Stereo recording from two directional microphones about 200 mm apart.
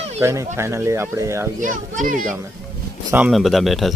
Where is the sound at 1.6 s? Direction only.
40° right (ahead or behind).